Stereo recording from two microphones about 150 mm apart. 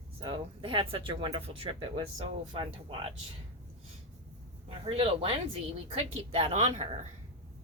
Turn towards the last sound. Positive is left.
turn(degrees=-40)  # may be behind; listen again after turning